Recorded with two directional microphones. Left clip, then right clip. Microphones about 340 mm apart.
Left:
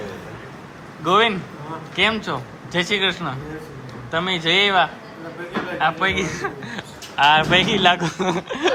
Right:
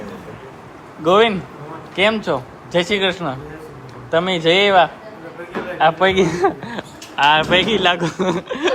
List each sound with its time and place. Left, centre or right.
1.0 s speech: centre